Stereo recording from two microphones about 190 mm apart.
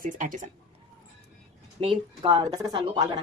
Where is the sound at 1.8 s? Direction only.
30° right (ahead or behind).